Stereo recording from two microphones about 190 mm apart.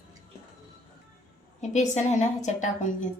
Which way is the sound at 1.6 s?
40° left (ahead or behind).